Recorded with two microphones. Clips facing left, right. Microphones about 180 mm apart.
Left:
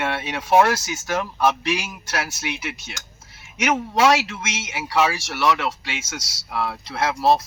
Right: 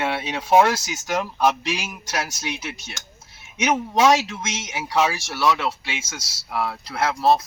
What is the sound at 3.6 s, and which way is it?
Speech, 20° right (ahead or behind).